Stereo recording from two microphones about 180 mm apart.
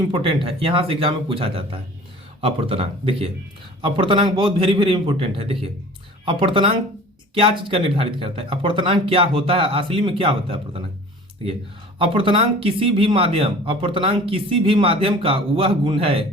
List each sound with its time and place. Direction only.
0.1 s speech: 30° right (ahead or behind)
11.9 s speech: 30° right (ahead or behind)